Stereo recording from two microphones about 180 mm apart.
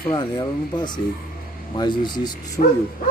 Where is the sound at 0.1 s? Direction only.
25° left (ahead or behind).